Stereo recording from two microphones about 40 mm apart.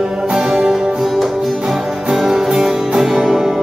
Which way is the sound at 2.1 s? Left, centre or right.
Centre.